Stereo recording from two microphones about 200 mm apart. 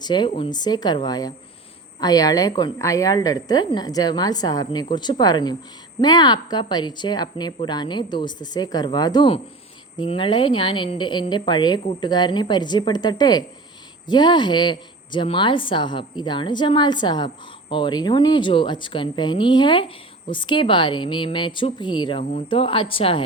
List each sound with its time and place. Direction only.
0.0 s a woman's voice: 20° left (ahead or behind)
22.2 s speech: 35° left (ahead or behind)
22.4 s a woman's voice: 25° left (ahead or behind)